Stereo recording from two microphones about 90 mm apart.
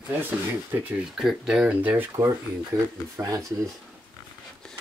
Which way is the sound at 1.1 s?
5° right (ahead or behind).